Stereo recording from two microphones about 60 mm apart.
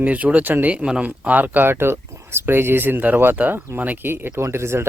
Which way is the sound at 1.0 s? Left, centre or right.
Right.